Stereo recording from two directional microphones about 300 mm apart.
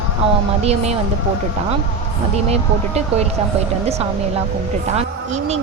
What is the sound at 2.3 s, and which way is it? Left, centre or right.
Speech, right.